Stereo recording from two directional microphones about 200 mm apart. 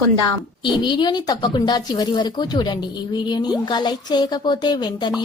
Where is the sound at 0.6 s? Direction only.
25° left (ahead or behind).